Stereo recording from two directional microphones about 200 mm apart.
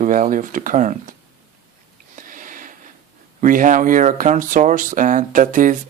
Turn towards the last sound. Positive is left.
turn(degrees=-40)  # may be behind; listen again after turning